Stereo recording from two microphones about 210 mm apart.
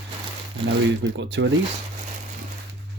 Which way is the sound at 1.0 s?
55° right (ahead or behind).